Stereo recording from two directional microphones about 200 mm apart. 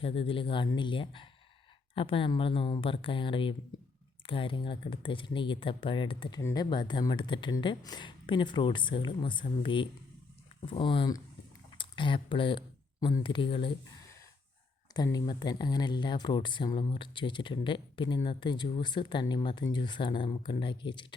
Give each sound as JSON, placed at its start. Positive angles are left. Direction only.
{"t": 0.0, "sound": "speech", "side_deg": 30}
{"t": 14.9, "sound": "speech", "side_deg": 20}